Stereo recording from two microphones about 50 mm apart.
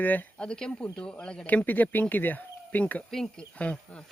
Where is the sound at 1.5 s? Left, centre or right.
Left.